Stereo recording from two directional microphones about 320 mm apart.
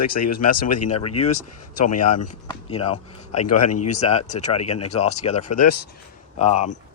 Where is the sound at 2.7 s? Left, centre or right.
Centre.